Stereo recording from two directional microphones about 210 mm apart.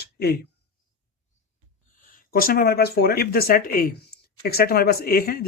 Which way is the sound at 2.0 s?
40° left (ahead or behind).